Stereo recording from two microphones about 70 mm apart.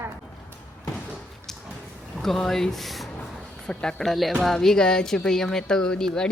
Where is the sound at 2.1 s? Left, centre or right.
Centre.